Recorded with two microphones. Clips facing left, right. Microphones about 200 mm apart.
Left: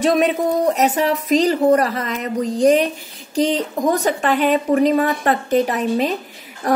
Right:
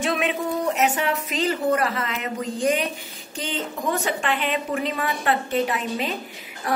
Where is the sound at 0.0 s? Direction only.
40° left (ahead or behind).